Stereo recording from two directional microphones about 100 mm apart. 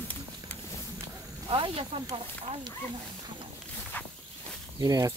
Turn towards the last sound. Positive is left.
turn(degrees=-35)  # may be behind; listen again after turning